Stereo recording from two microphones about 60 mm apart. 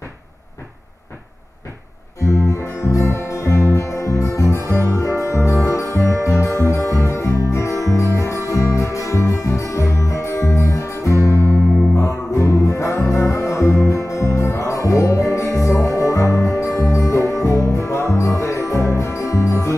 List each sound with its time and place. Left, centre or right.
2.2 s music: left
11.1 s music: right
11.4 s music: left